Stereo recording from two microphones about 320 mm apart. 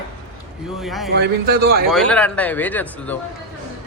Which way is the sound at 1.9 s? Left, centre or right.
Centre.